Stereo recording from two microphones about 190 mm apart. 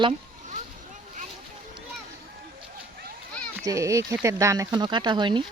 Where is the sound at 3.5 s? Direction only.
15° right (ahead or behind).